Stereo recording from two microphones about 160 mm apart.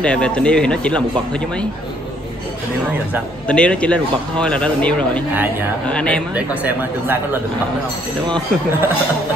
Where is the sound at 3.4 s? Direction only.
5° left (ahead or behind).